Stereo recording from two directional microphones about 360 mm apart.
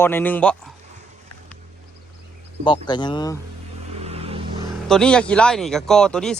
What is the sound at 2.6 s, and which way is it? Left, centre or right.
Speech, centre.